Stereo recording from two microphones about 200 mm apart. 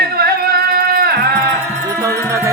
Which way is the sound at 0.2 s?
50° right (ahead or behind).